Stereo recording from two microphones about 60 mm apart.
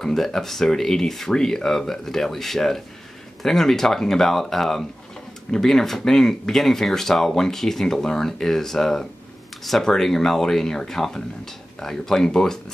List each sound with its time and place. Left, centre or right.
0.0 s speech: centre